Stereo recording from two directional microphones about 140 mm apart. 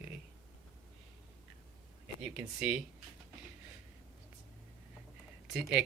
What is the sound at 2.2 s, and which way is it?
Speech, 10° right (ahead or behind).